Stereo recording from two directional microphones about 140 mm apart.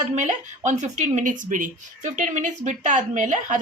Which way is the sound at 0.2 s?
60° right (ahead or behind).